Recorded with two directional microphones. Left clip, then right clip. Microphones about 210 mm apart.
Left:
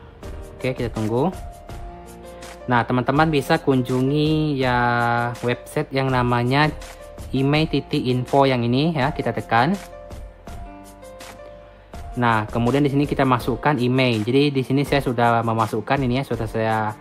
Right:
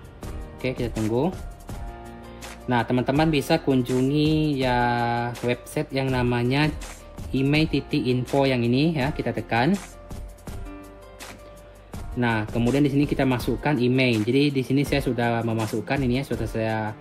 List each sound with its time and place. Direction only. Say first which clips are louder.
0.6 s speech: left 3 dB; 15° left (ahead or behind)
2.7 s speech: left 4 dB; 15° left (ahead or behind)
12.2 s speech: left 5 dB; 15° left (ahead or behind)